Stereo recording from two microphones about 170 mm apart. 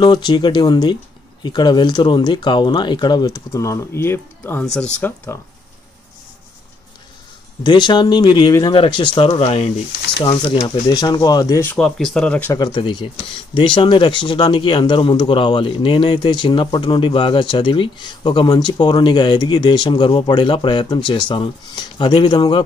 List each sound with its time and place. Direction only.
0.0 s speech: 25° left (ahead or behind)
7.6 s speech: 25° left (ahead or behind)
11.7 s speech: centre (ahead or behind)
12.5 s speech: 25° left (ahead or behind)